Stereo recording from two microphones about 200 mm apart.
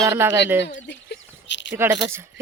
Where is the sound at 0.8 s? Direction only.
60° left (ahead or behind).